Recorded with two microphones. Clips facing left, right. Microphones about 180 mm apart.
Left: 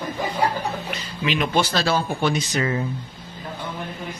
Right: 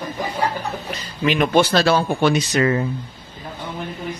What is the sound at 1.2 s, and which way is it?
Speech, 55° right (ahead or behind).